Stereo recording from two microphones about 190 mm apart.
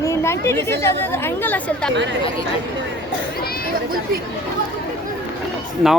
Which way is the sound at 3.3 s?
55° left (ahead or behind).